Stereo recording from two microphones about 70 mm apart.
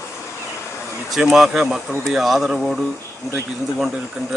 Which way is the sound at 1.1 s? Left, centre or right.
Centre.